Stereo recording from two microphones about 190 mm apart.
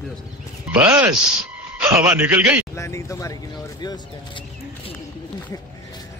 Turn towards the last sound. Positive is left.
turn(degrees=25)  # may be behind; listen again after turning